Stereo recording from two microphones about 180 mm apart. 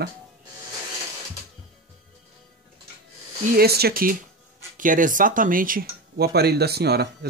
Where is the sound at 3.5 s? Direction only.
60° right (ahead or behind).